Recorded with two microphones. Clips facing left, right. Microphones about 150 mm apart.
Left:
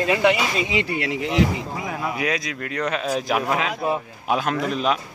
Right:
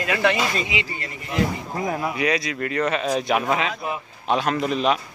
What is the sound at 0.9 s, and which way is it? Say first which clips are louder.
Speech: left 8 dB; 80° left.